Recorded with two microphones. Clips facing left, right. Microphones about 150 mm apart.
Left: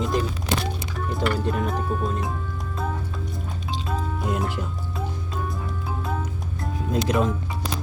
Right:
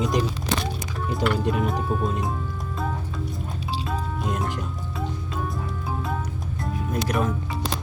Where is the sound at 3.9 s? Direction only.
Centre (ahead or behind).